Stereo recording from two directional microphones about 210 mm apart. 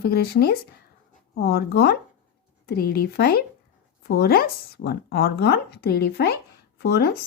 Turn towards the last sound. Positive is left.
turn(degrees=50)  # may be behind; listen again after turning